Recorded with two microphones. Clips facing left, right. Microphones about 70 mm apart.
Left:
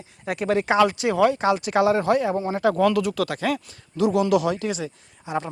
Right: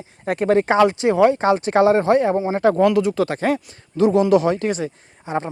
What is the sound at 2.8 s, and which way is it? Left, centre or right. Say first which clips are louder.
Speech: right 4 dB; right.